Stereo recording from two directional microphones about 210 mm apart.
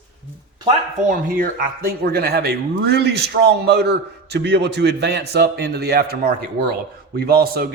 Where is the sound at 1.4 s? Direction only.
45° right (ahead or behind).